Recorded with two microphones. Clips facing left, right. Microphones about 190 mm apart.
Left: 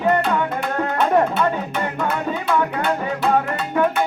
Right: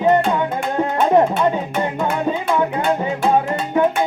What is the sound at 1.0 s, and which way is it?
Music, 20° right (ahead or behind).